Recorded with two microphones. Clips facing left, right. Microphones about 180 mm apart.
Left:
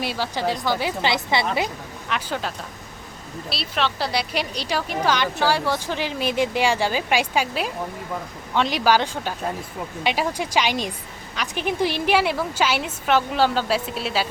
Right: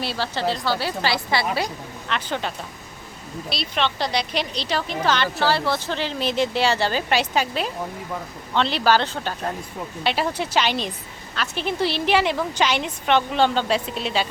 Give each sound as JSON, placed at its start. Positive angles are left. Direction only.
{"t": 0.0, "sound": "a woman's voice", "side_deg": 15}
{"t": 3.5, "sound": "a woman's voice", "side_deg": 5}